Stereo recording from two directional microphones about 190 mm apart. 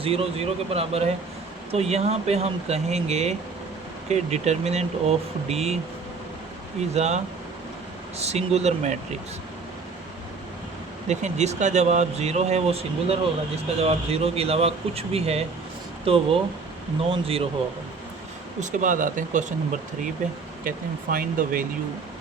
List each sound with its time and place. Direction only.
0.0 s speech: 30° right (ahead or behind)
6.9 s speech: 35° right (ahead or behind)
8.2 s speech: 35° right (ahead or behind)
11.1 s speech: 35° right (ahead or behind)
18.6 s speech: 45° right (ahead or behind)
20.7 s speech: 50° right (ahead or behind)